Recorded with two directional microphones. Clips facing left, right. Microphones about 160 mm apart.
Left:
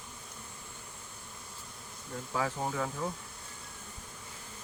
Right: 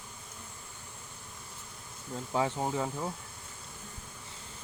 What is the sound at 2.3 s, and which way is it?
Speech, 25° right (ahead or behind).